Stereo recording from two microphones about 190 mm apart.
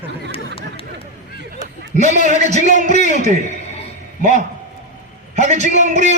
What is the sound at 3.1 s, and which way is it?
A man's voice, 40° right (ahead or behind).